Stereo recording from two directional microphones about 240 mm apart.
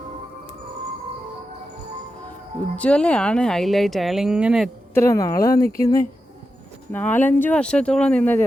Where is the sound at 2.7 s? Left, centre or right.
Centre.